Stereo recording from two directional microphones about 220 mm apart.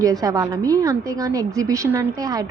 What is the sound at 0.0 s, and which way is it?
A woman's voice, 15° right (ahead or behind).